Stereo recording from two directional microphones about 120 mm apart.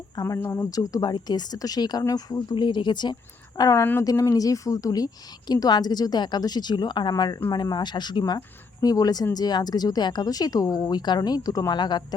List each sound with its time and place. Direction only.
0.3 s a woman's voice: 20° left (ahead or behind); by 3.2 s 40° left (ahead or behind)
3.6 s a woman's voice: 25° left (ahead or behind)